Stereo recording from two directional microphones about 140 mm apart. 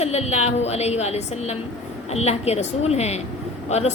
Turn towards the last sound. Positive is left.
turn(degrees=55)  # may be behind; listen again after turning